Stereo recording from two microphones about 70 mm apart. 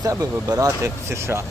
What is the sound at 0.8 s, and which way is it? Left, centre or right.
Speech, right.